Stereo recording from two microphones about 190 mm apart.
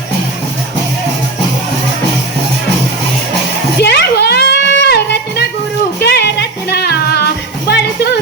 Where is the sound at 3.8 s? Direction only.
60° left (ahead or behind).